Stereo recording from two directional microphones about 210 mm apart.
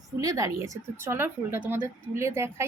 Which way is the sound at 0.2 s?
15° right (ahead or behind).